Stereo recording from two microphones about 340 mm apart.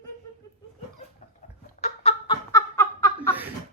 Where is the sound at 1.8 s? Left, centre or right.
Centre.